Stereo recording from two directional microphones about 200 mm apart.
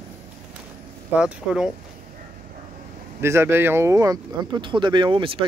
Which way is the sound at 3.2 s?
15° right (ahead or behind).